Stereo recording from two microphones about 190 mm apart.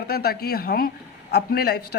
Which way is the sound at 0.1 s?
55° left (ahead or behind).